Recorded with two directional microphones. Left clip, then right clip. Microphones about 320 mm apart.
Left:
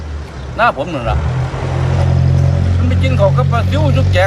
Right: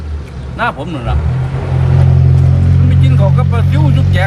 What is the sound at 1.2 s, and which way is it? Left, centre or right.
Vehicle, left.